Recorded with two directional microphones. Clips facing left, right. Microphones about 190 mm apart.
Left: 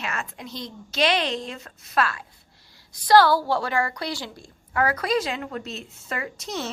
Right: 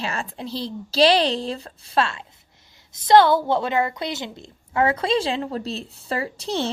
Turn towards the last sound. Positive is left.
turn(degrees=-30)  # may be behind; listen again after turning